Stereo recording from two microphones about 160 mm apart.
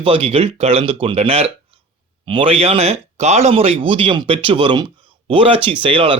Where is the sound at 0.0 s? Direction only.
35° right (ahead or behind).